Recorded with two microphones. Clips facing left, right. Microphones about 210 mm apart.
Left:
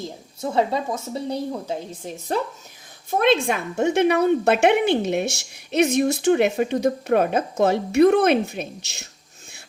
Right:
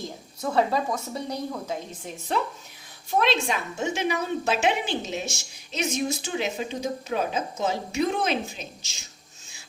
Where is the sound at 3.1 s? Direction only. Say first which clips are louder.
Left 5 dB; 55° left (ahead or behind).